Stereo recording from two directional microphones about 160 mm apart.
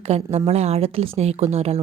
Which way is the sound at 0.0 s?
40° right (ahead or behind).